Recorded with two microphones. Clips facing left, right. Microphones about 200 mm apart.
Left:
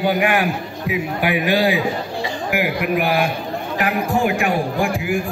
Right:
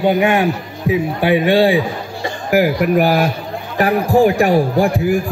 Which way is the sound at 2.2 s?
40° right (ahead or behind).